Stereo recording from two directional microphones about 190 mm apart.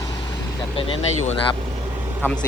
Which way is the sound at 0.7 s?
30° left (ahead or behind).